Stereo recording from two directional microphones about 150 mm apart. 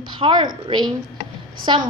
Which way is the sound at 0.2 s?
30° right (ahead or behind).